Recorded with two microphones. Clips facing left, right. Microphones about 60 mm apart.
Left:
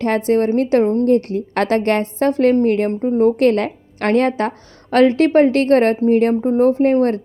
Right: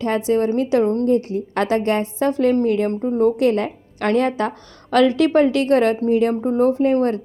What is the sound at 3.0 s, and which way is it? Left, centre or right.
Speech, left.